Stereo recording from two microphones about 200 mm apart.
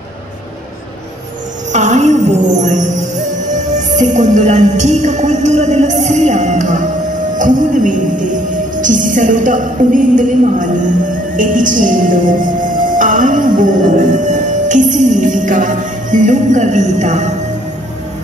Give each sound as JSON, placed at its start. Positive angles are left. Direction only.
{"t": 1.7, "sound": "music", "side_deg": -35}
{"t": 3.5, "sound": "speech", "side_deg": -40}